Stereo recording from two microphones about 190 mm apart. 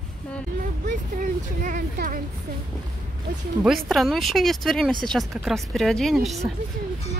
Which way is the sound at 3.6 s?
Centre (ahead or behind).